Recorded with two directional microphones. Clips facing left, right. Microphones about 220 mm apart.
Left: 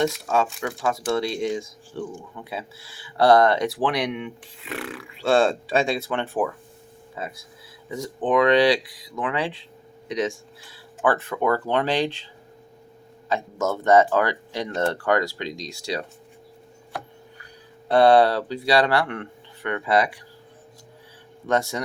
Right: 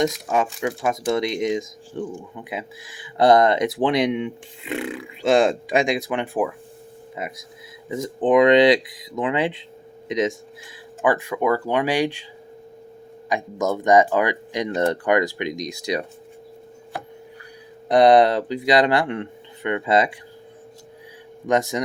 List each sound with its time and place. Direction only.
0.0 s speech: 15° right (ahead or behind)
13.2 s speech: 15° right (ahead or behind)
17.8 s speech: 15° right (ahead or behind)
21.4 s speech: 15° right (ahead or behind)